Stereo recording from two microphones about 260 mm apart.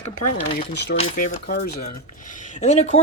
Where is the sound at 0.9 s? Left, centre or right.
Left.